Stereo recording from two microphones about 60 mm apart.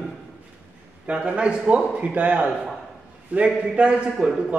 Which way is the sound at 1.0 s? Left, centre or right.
Centre.